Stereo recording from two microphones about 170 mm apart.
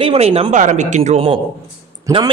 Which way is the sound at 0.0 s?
35° right (ahead or behind).